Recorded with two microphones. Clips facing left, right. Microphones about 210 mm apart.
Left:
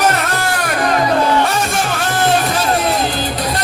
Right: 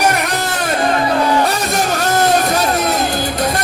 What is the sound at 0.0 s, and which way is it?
Music, 15° right (ahead or behind).